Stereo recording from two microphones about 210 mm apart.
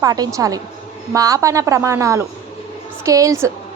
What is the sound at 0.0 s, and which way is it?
A woman's voice, 15° right (ahead or behind).